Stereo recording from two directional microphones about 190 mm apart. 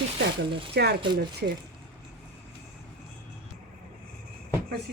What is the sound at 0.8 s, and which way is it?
Speech, 60° right (ahead or behind).